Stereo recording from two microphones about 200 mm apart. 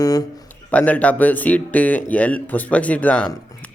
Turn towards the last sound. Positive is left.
turn(degrees=5)  # may be behind; listen again after turning